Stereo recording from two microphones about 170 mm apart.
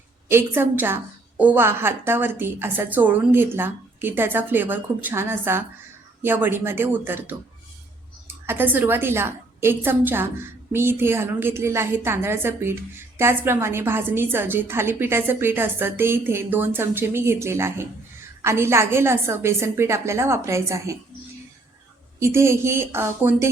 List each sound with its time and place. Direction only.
0.3 s a woman's voice: 15° right (ahead or behind)
8.4 s a woman's voice: 10° right (ahead or behind)
22.2 s a woman's voice: 15° right (ahead or behind)